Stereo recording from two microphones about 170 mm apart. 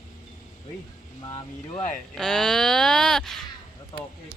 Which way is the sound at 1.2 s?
30° left (ahead or behind).